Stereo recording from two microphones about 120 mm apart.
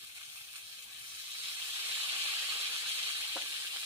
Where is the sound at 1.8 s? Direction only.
20° right (ahead or behind).